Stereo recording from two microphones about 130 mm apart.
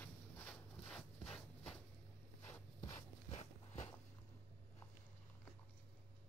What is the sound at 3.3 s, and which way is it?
Walk, 60° left (ahead or behind).